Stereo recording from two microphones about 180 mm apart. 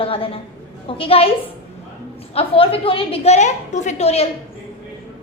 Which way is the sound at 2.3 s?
30° left (ahead or behind).